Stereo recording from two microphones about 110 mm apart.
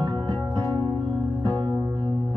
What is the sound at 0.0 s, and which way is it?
Music, 35° right (ahead or behind).